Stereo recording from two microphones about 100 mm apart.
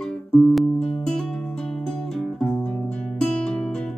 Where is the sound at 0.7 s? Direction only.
10° left (ahead or behind).